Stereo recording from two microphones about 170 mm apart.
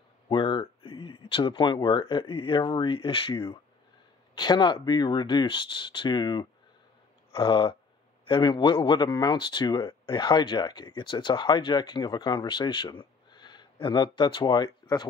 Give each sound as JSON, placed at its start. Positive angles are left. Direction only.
{"t": 0.3, "sound": "speech", "side_deg": 30}